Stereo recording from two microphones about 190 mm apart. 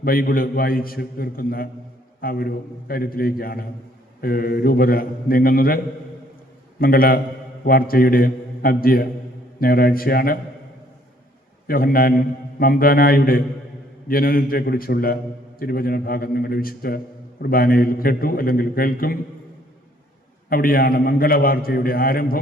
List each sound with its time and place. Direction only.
0.0 s a man's voice: 50° left (ahead or behind)
11.7 s a man's voice: 50° left (ahead or behind)
20.5 s a man's voice: 50° left (ahead or behind)